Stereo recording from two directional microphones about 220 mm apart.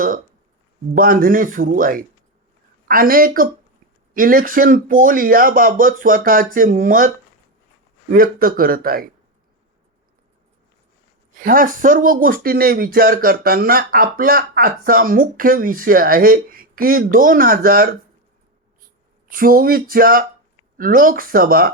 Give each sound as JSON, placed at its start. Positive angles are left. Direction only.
{"t": 0.9, "sound": "speech", "side_deg": -40}
{"t": 8.1, "sound": "speech", "side_deg": -40}
{"t": 11.3, "sound": "speech", "side_deg": -40}
{"t": 19.3, "sound": "speech", "side_deg": -40}